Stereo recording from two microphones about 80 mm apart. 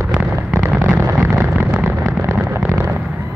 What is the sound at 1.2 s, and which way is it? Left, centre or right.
Explosion, right.